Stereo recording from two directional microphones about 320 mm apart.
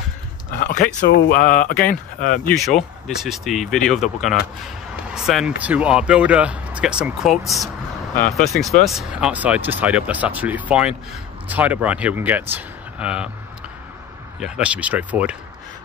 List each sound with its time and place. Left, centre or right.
0.6 s speech: left
2.4 s speech: centre
8.8 s speech: centre
14.4 s speech: centre